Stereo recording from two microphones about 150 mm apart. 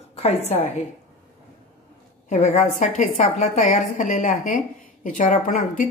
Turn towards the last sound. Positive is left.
turn(degrees=60)  # may be behind; listen again after turning